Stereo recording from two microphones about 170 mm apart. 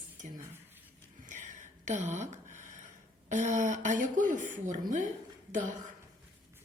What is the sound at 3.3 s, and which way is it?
A woman's voice, 45° right (ahead or behind).